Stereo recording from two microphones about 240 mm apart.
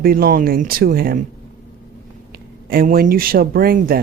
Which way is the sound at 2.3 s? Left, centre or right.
Right.